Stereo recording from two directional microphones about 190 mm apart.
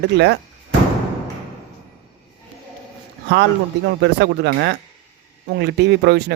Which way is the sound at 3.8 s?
60° right (ahead or behind).